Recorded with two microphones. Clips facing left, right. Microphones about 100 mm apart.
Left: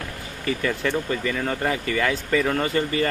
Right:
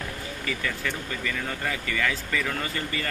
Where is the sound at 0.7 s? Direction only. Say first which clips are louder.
Left 7 dB; 25° left (ahead or behind).